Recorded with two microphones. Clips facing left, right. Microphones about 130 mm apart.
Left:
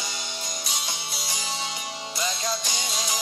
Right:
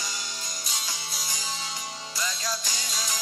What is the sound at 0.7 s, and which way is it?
Music, 75° left (ahead or behind).